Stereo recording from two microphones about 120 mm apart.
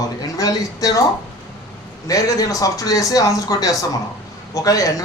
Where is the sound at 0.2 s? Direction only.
30° left (ahead or behind).